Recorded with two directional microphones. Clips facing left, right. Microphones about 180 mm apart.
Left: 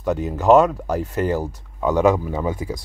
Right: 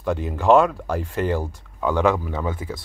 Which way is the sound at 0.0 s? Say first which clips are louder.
Left 2 dB; 5° left (ahead or behind).